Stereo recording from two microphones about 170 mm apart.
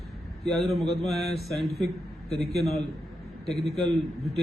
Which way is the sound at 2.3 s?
35° left (ahead or behind).